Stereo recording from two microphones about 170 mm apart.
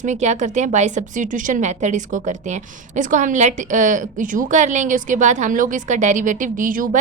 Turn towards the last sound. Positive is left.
turn(degrees=-55)  # may be behind; listen again after turning